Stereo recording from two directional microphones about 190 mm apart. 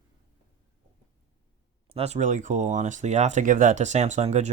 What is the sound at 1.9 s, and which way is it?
Speech, 35° right (ahead or behind).